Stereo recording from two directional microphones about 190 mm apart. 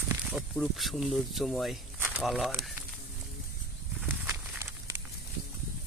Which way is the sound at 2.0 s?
5° right (ahead or behind).